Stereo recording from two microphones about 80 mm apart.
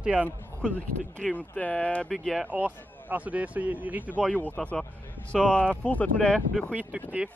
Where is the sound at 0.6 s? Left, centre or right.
Centre.